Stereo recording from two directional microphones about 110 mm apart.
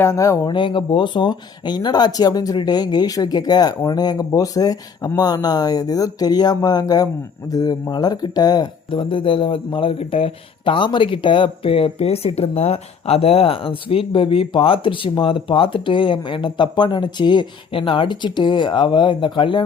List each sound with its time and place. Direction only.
0.0 s speech: 25° left (ahead or behind)
0.4 s speech: 45° left (ahead or behind)